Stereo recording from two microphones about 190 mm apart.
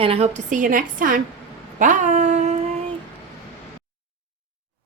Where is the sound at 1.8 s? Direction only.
40° right (ahead or behind).